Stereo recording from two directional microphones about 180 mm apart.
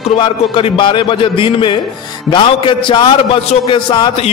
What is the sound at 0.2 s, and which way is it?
A man's voice, 30° left (ahead or behind).